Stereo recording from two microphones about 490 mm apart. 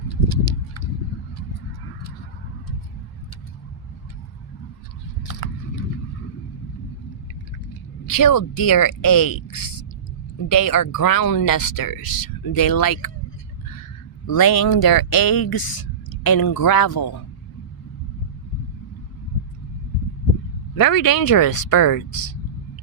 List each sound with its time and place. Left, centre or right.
5.4 s a sound: left
8.1 s speech: left
14.3 s speech: left
20.7 s speech: left